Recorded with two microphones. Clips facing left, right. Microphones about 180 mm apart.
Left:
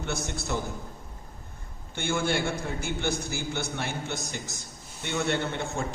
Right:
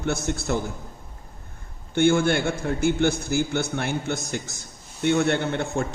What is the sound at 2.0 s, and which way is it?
A man's voice, 55° right (ahead or behind).